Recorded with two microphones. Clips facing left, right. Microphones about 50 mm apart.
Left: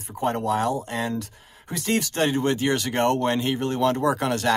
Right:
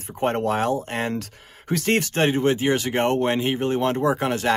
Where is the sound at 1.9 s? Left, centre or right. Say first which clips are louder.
Right 2 dB; right.